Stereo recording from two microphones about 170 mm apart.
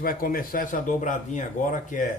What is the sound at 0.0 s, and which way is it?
Speech, 60° left (ahead or behind).